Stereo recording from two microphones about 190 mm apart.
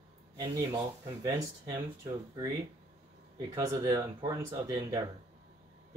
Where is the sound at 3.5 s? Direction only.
20° right (ahead or behind).